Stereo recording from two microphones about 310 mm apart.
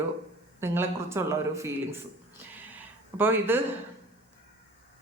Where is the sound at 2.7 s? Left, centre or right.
Centre.